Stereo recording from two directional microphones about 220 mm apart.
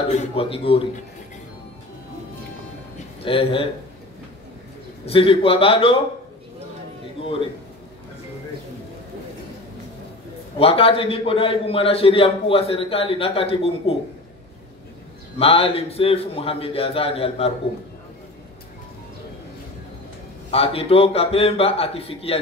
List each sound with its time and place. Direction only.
0.4 s a man's voice: 25° left (ahead or behind)
3.3 s a man's voice: 25° left (ahead or behind)
5.0 s a man's voice: 25° left (ahead or behind)
10.6 s a man's voice: 25° left (ahead or behind)
15.3 s a man's voice: 25° left (ahead or behind)
20.5 s a man's voice: 25° left (ahead or behind)